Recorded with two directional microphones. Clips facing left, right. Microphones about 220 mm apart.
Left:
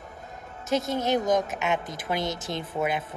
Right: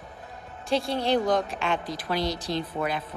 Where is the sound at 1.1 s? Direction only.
20° left (ahead or behind).